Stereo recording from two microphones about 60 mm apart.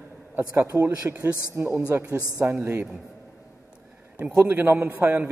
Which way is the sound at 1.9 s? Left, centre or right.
Right.